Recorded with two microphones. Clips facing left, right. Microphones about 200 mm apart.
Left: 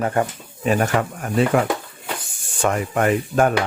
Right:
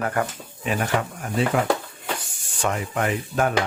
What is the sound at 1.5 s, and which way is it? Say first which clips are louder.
Speech: left 4 dB; 55° left (ahead or behind).